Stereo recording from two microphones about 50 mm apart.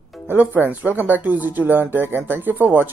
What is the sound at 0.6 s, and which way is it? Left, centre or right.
Speech, right.